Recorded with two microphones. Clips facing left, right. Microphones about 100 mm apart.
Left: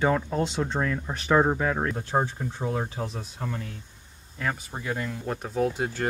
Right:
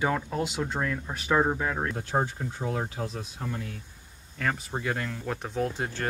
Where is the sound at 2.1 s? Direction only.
15° left (ahead or behind).